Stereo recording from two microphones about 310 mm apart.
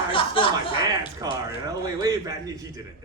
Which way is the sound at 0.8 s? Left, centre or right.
Centre.